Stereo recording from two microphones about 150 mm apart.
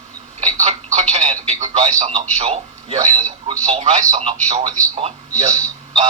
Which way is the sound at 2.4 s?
40° right (ahead or behind).